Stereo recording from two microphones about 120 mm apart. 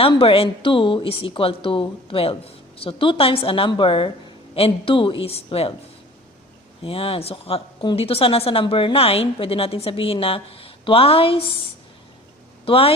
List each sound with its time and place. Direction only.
0.0 s speech: 50° left (ahead or behind)
6.8 s speech: 55° left (ahead or behind)
12.6 s speech: 50° left (ahead or behind)